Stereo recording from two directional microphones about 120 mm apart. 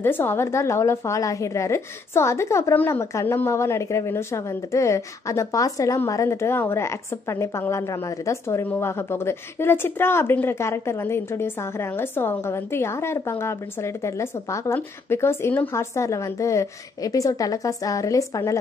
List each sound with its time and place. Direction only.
0.0 s a woman's voice: 20° left (ahead or behind)